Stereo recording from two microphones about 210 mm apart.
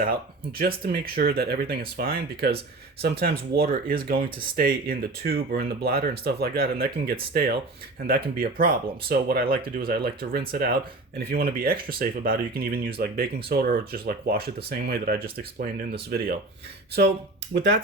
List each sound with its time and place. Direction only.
0.6 s speech: 45° right (ahead or behind)
17.5 s speech: 55° right (ahead or behind)